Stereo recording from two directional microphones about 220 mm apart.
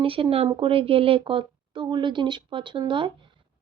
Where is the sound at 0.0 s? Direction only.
25° right (ahead or behind).